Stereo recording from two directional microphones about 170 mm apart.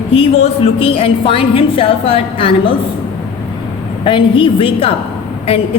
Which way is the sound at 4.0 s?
30° left (ahead or behind).